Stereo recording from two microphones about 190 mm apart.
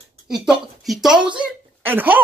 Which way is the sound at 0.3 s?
Centre (ahead or behind).